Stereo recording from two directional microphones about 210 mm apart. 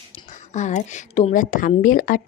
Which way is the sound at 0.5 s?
35° left (ahead or behind).